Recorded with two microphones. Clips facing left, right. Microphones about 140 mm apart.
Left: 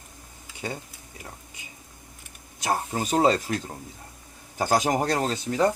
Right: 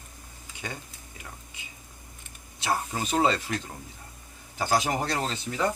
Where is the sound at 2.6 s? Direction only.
45° left (ahead or behind).